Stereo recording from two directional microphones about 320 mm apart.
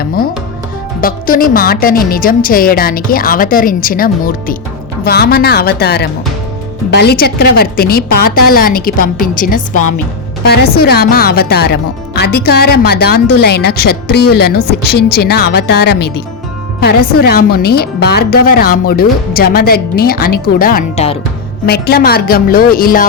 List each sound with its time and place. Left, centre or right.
0.0 s a woman's voice: left